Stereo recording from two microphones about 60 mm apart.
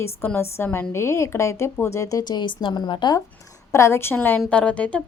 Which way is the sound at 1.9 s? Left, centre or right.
Left.